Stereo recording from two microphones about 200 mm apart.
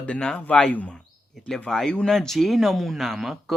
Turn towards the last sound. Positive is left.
turn(degrees=0)  # may be behind; listen again after turning